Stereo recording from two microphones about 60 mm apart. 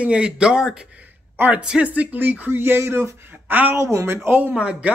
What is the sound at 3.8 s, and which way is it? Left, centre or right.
Speech, right.